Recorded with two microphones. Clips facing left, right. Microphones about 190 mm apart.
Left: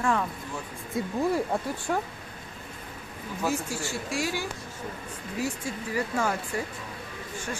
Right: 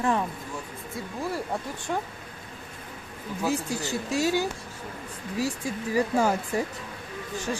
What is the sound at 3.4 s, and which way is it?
Speech, 15° right (ahead or behind).